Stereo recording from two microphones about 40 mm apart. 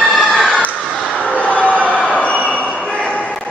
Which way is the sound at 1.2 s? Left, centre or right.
Left.